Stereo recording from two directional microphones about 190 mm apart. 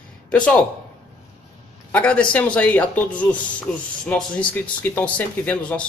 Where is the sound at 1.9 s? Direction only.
5° left (ahead or behind).